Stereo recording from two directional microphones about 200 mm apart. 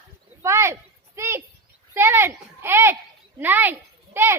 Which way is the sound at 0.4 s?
15° right (ahead or behind).